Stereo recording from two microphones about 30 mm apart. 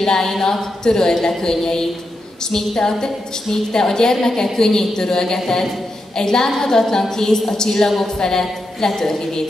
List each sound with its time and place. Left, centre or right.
0.0 s a woman's voice: left